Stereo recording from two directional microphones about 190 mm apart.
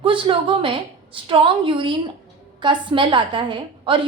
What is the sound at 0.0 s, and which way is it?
A woman's voice, 25° right (ahead or behind).